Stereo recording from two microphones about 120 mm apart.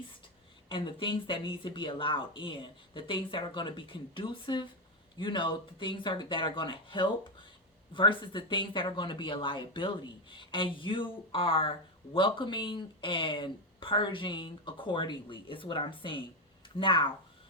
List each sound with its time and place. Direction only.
0.7 s speech: 45° left (ahead or behind)